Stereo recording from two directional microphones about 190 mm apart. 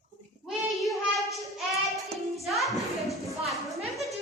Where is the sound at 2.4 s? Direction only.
Centre (ahead or behind).